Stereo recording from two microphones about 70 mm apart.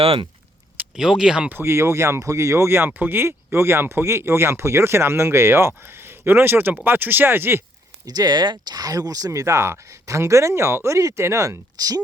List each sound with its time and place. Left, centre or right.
0.9 s speech: centre
1.5 s speech: right
8.0 s speech: right